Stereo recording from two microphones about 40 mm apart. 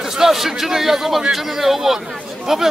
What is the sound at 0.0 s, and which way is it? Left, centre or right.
A man's voice, centre.